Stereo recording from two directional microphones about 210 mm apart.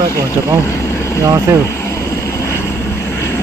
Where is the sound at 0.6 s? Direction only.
15° left (ahead or behind).